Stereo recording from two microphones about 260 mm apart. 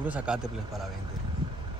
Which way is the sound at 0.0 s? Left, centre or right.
Centre.